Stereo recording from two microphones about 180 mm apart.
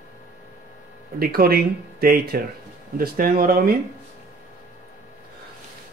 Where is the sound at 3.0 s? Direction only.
55° right (ahead or behind).